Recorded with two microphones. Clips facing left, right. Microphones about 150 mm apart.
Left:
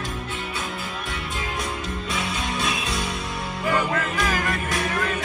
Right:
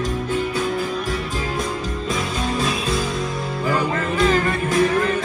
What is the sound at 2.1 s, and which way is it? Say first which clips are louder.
Music: right 5 dB; 35° right (ahead or behind).